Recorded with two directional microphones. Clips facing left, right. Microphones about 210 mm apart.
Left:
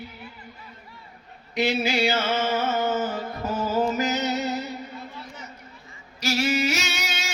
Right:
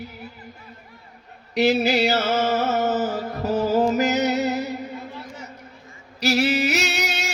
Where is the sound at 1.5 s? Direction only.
40° right (ahead or behind).